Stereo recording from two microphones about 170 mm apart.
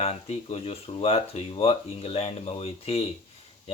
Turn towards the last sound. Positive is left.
turn(degrees=35)  # may be behind; listen again after turning